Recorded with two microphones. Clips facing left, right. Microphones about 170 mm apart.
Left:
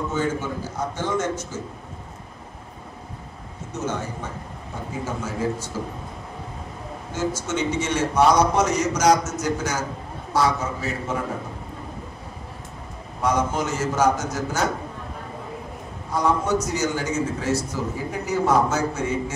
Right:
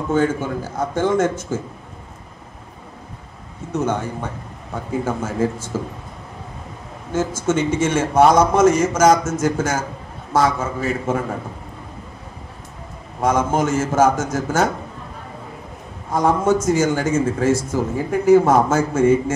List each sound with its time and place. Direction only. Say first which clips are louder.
0.7 s a man's voice: right 8 dB; 55° right (ahead or behind)
3.7 s a man's voice: right 6 dB; 60° right (ahead or behind)
7.1 s a man's voice: right 6 dB; 50° right (ahead or behind)
13.2 s a man's voice: right 5 dB; 50° right (ahead or behind)
16.1 s a man's voice: right 5 dB; 50° right (ahead or behind)